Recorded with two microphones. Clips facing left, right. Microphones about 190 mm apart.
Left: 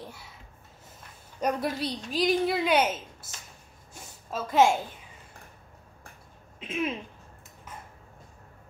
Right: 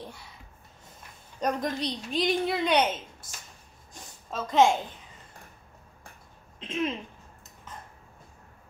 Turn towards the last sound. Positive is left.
turn(degrees=5)  # may be behind; listen again after turning